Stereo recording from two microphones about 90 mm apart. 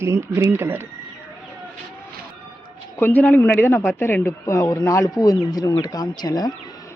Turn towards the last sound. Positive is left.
turn(degrees=45)  # may be behind; listen again after turning